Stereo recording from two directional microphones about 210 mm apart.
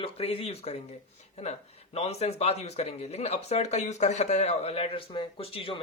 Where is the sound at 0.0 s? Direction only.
25° left (ahead or behind).